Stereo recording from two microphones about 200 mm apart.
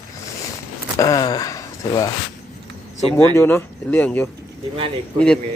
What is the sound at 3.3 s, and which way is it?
Speech, 10° left (ahead or behind).